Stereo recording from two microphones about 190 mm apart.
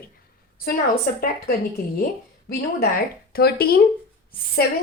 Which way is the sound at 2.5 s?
50° left (ahead or behind).